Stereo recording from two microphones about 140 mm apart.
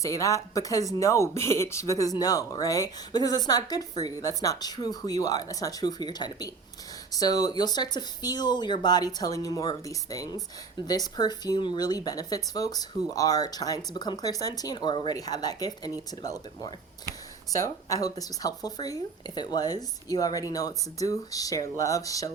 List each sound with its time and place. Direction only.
0.0 s speech: 25° left (ahead or behind)